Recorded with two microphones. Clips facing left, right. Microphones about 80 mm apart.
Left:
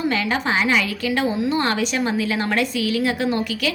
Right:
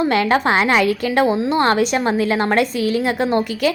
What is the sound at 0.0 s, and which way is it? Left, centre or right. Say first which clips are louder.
A woman's voice: right 6 dB; right.